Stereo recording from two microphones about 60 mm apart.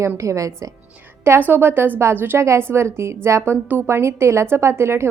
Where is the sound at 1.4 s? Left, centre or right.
Right.